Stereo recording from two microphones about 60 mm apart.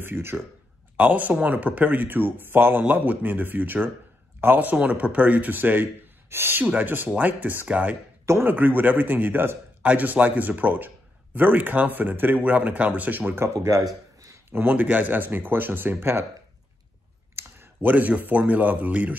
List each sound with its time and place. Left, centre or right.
0.0 s speech: right
0.9 s speech: right
8.5 s speech: right
9.8 s speech: right
13.3 s speech: right
14.5 s speech: right
17.4 s speech: right